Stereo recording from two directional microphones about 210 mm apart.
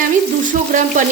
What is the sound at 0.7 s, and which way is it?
Speech, 40° right (ahead or behind).